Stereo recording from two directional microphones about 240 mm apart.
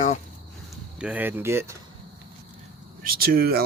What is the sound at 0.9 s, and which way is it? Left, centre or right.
Speech, centre.